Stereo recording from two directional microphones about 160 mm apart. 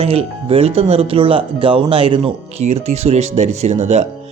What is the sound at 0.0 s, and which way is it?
Speech, 40° right (ahead or behind).